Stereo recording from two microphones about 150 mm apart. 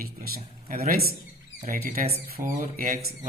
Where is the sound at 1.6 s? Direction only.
70° right (ahead or behind).